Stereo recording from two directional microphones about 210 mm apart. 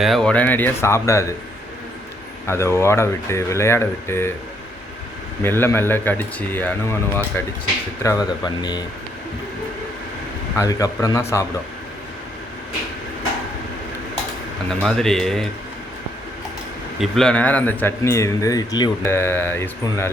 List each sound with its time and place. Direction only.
0.0 s speech: centre (ahead or behind)
2.5 s speech: 10° left (ahead or behind)
5.4 s speech: 10° left (ahead or behind)
10.6 s speech: 15° left (ahead or behind)
14.7 s speech: 5° left (ahead or behind)
17.0 s speech: 5° left (ahead or behind)